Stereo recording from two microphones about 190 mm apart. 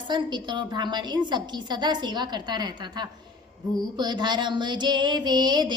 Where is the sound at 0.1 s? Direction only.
25° right (ahead or behind).